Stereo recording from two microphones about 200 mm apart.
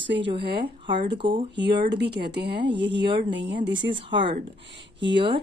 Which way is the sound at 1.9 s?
60° right (ahead or behind).